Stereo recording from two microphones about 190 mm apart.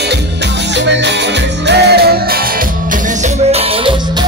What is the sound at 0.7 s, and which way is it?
Music, 65° right (ahead or behind).